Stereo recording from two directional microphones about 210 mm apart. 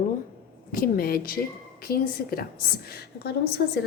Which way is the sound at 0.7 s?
45° left (ahead or behind).